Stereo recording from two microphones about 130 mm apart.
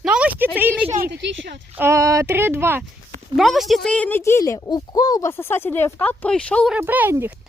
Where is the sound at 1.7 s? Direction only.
20° right (ahead or behind).